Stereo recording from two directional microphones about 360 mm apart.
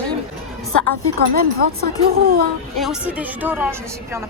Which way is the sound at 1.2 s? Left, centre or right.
Right.